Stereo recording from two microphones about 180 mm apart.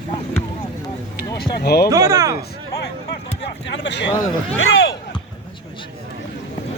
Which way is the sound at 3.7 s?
75° left (ahead or behind).